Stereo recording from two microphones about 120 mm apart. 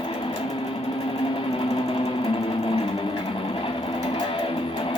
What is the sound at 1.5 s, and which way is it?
Sewing machine, 50° left (ahead or behind).